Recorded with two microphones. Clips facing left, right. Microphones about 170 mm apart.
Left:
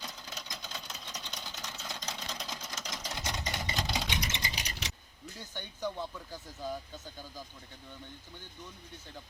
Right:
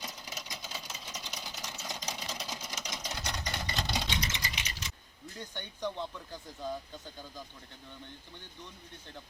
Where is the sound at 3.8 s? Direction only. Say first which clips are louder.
Even; centre (ahead or behind).